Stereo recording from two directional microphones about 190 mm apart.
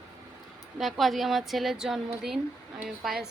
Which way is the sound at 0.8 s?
Centre (ahead or behind).